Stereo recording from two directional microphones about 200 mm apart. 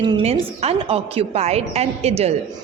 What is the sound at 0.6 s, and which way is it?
A woman's voice, 30° right (ahead or behind).